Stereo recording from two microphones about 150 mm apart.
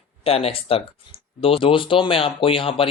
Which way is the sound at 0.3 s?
40° left (ahead or behind).